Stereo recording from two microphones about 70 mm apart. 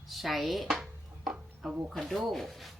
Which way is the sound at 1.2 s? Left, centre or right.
Centre.